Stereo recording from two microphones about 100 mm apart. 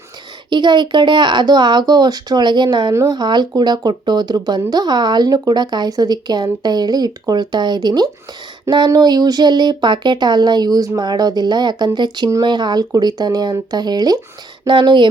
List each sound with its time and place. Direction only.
0.5 s speech: 50° right (ahead or behind)
2.9 s speech: 30° right (ahead or behind)
3.2 s speech: 45° right (ahead or behind)
14.7 s speech: 50° right (ahead or behind)